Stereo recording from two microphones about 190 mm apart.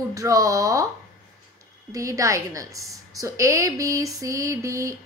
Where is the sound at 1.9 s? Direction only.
15° right (ahead or behind).